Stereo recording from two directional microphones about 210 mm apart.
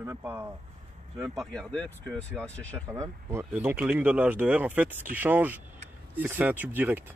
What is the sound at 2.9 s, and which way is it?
Speech, 15° right (ahead or behind).